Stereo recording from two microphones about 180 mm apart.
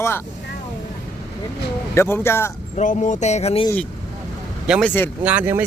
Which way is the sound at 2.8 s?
40° left (ahead or behind).